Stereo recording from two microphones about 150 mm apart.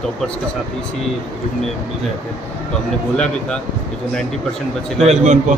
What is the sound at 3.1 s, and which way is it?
Speech, 5° left (ahead or behind).